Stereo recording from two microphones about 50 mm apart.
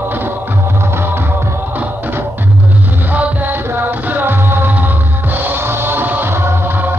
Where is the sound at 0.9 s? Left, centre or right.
Right.